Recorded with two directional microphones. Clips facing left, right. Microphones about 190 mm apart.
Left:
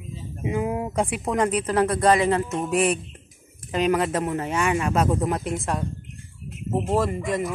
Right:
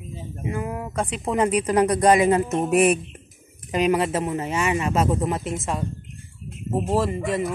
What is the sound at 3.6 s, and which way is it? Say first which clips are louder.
Speech: right 1 dB; 10° right (ahead or behind).